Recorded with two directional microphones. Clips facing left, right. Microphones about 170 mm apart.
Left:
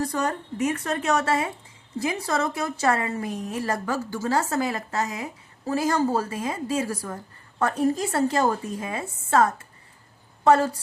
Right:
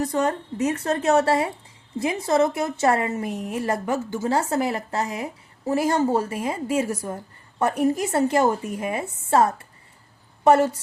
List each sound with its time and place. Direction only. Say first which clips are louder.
0.0 s a woman's voice: right 3 dB; 25° right (ahead or behind)